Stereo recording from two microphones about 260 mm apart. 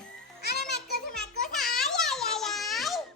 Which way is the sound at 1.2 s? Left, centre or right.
Centre.